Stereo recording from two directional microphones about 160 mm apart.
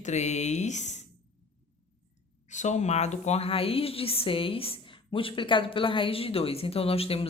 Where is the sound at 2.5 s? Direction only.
50° left (ahead or behind).